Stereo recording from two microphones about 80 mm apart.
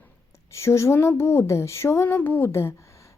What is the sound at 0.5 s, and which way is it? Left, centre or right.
A woman's voice, left.